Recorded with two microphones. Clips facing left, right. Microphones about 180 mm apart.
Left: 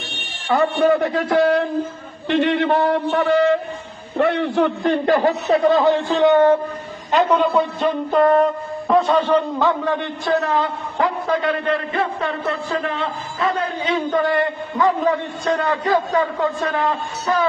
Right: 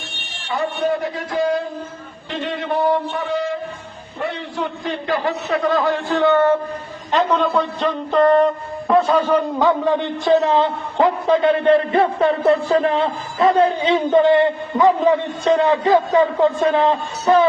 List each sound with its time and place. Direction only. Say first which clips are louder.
0.4 s a man's voice: left 5 dB; 60° left (ahead or behind)
5.5 s a man's voice: left 3 dB; 30° left (ahead or behind); by 17.4 s 25° right (ahead or behind)